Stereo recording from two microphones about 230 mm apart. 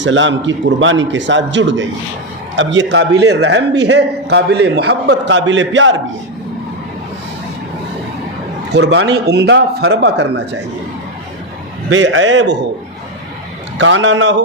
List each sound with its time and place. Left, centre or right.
0.0 s a man's voice: right
8.7 s a man's voice: right
11.9 s a man's voice: right
13.7 s a man's voice: right